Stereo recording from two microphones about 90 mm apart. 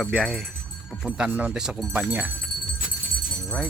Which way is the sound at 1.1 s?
15° right (ahead or behind).